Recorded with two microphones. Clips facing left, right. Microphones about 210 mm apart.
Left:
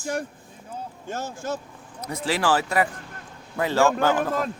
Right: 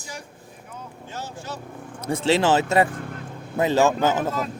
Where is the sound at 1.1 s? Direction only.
45° left (ahead or behind).